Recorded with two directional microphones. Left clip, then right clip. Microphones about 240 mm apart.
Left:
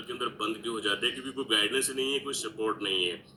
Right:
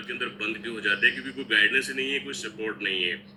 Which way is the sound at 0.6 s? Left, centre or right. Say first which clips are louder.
Right 8 dB; left.